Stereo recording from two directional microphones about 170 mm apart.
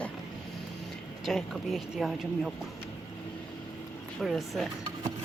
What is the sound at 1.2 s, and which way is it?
Speech, centre (ahead or behind).